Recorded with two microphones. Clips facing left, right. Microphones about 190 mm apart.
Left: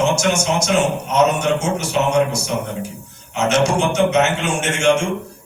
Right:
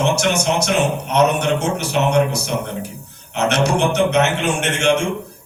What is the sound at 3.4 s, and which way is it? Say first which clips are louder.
A man's voice: even; 60° right (ahead or behind).